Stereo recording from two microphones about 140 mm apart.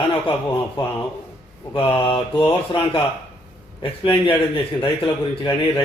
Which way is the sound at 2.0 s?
40° left (ahead or behind).